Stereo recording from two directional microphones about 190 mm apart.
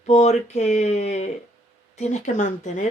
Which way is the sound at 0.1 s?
35° left (ahead or behind).